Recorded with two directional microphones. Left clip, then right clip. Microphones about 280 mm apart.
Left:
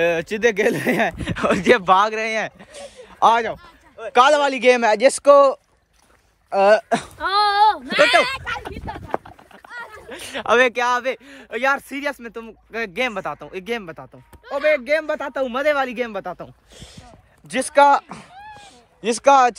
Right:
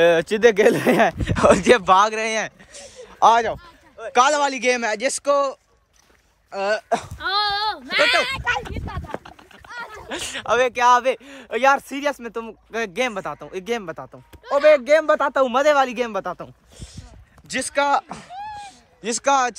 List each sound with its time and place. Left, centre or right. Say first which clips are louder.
0.0 s a man's voice: right 3 dB; centre
7.2 s a sound: left 8 dB; centre
7.9 s speech: left 3 dB; centre
9.7 s a sound: right 1 dB; right
10.0 s speech: right 5 dB; centre
10.4 s speech: left 3 dB; left
10.8 s a man's voice: right 4 dB; centre
14.4 s a sound: right 5 dB; right
14.9 s a man's voice: right 5 dB; centre
17.5 s speech: left 6 dB; centre